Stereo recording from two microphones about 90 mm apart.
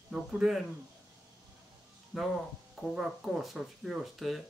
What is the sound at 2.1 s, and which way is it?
Speech, 5° right (ahead or behind).